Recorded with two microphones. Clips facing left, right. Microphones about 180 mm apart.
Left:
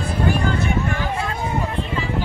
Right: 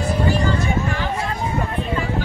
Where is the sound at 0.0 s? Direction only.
55° left (ahead or behind).